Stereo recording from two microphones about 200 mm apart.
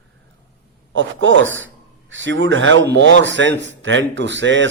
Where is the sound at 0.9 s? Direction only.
70° right (ahead or behind).